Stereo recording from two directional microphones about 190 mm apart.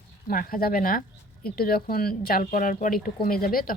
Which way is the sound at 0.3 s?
45° left (ahead or behind).